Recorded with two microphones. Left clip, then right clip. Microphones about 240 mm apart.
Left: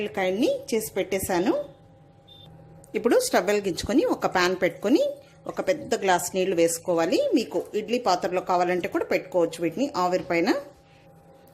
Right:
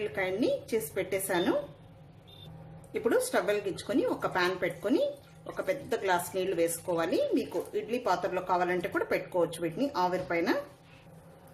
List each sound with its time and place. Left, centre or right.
0.0 s a woman's voice: left
2.9 s a woman's voice: left